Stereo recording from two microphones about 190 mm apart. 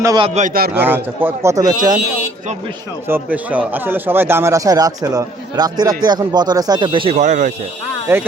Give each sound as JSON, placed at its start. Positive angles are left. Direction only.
{"t": 0.0, "sound": "speech", "side_deg": -20}
{"t": 0.3, "sound": "a man's voice", "side_deg": -45}
{"t": 0.8, "sound": "speech", "side_deg": -10}
{"t": 3.1, "sound": "speech", "side_deg": -10}
{"t": 7.2, "sound": "speech", "side_deg": -40}